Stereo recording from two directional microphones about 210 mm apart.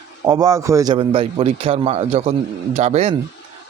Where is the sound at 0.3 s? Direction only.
15° right (ahead or behind).